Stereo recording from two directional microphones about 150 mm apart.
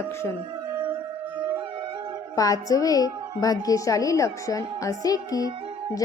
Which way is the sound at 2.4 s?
25° left (ahead or behind).